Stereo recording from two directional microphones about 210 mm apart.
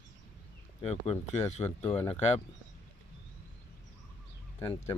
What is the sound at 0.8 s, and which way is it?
Speech, 30° left (ahead or behind).